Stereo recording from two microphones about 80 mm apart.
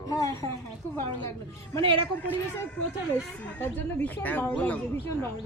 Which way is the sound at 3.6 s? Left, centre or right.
Left.